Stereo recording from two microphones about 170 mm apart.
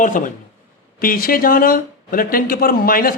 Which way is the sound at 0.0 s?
50° left (ahead or behind).